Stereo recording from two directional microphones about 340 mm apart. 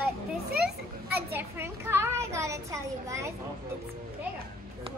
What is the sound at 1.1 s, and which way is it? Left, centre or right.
A child's voice, centre.